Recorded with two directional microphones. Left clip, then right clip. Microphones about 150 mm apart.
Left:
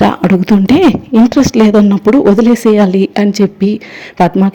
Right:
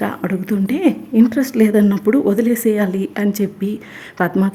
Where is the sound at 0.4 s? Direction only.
35° left (ahead or behind).